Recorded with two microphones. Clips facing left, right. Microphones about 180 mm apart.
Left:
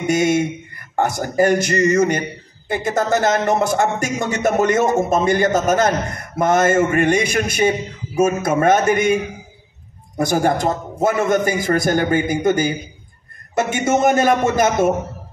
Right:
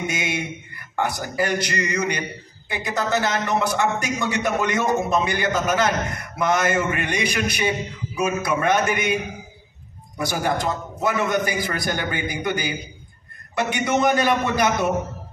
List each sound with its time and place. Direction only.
0.0 s speech: 45° left (ahead or behind)